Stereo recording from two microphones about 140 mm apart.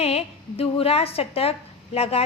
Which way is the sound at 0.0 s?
45° left (ahead or behind).